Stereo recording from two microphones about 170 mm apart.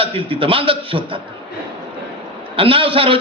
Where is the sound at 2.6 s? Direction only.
30° right (ahead or behind).